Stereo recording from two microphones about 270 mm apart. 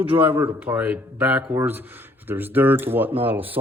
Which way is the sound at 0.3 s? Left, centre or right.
Centre.